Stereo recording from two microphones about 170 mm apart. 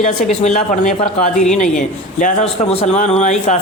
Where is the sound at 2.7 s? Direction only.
35° left (ahead or behind).